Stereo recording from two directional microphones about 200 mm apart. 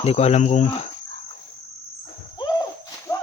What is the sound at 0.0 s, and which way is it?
Speech, 30° left (ahead or behind).